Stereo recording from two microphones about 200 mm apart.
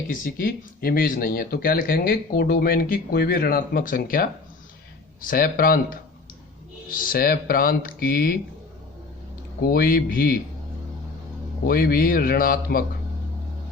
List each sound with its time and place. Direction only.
0.1 s speech: 45° left (ahead or behind)
6.8 s speech: 45° left (ahead or behind)
9.6 s speech: 50° left (ahead or behind)
11.6 s speech: 50° left (ahead or behind)